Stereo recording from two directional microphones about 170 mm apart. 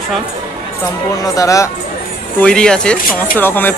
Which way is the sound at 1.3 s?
20° left (ahead or behind).